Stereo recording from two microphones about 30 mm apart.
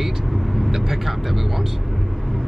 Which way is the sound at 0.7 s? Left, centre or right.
Centre.